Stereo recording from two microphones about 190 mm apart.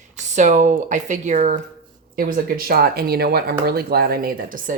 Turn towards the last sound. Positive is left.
turn(degrees=-50)  # may be behind; listen again after turning